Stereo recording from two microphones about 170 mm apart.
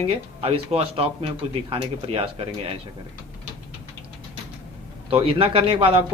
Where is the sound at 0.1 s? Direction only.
35° right (ahead or behind).